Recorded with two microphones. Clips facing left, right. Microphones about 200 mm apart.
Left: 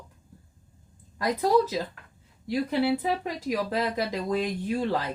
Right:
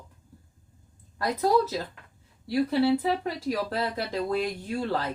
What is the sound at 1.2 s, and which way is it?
Speech, 15° left (ahead or behind).